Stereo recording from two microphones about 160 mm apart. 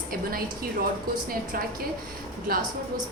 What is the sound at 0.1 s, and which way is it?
Speech, 65° right (ahead or behind).